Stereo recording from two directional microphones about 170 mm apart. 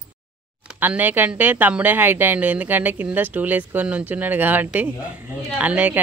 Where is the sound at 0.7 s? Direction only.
10° right (ahead or behind).